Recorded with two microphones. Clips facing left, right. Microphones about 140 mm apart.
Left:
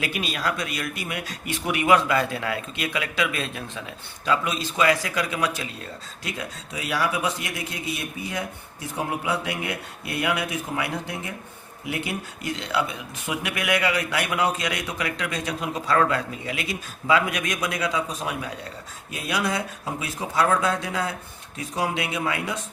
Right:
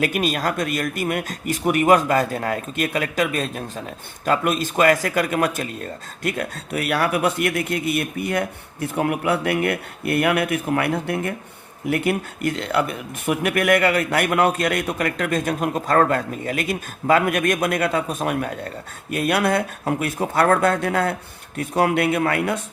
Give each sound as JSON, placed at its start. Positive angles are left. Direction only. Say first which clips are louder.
{"t": 0.0, "sound": "a man's voice", "louder": "right 6 dB", "side_deg": -50}